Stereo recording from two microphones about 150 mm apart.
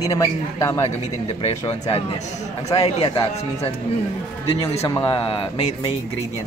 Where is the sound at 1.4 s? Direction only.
45° left (ahead or behind).